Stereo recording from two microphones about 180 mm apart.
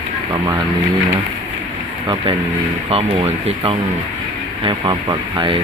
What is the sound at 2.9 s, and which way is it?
Speech, 35° right (ahead or behind).